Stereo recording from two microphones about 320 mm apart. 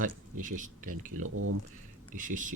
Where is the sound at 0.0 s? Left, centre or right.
Right.